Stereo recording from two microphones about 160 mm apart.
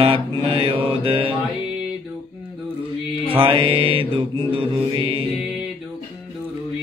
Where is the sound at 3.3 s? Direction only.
35° right (ahead or behind).